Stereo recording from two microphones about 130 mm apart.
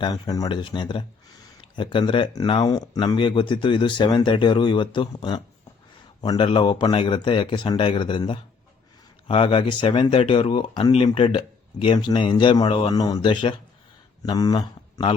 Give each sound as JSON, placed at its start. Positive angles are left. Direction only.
{"t": 0.0, "sound": "speech", "side_deg": 30}